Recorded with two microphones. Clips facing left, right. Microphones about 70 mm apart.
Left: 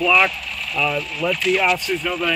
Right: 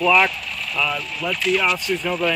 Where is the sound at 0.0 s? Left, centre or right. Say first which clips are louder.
Even; centre.